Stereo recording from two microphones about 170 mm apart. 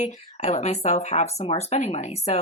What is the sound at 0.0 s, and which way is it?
Speech, 40° left (ahead or behind).